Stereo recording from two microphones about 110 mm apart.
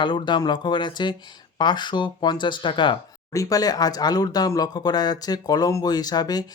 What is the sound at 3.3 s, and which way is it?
Speech, 30° left (ahead or behind).